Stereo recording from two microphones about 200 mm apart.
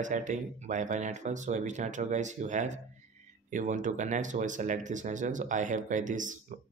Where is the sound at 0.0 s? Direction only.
40° right (ahead or behind).